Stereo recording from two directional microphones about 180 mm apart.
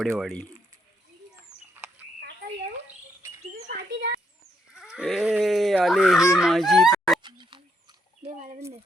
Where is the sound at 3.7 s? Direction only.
65° right (ahead or behind).